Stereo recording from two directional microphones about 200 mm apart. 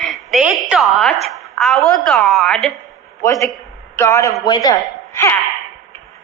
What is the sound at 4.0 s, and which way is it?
Speech, 15° left (ahead or behind).